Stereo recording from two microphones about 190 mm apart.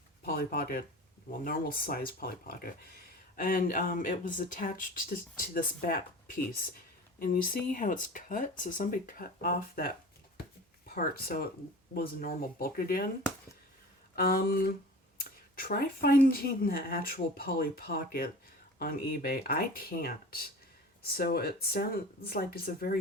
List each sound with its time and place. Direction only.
0.3 s speech: 50° left (ahead or behind)
14.2 s speech: 50° left (ahead or behind)